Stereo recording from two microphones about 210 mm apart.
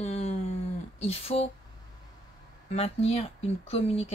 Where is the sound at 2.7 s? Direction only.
30° left (ahead or behind).